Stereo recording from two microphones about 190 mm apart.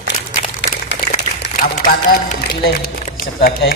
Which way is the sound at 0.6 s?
65° left (ahead or behind).